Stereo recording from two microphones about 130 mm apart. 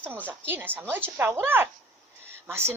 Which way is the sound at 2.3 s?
20° right (ahead or behind).